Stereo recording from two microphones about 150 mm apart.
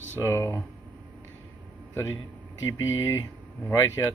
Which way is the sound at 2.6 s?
25° left (ahead or behind).